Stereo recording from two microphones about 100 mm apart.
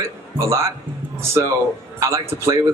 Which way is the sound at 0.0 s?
30° right (ahead or behind).